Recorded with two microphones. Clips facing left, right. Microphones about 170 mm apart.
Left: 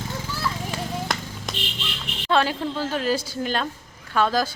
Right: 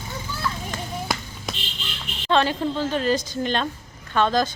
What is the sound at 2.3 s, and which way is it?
A woman's voice, 5° left (ahead or behind).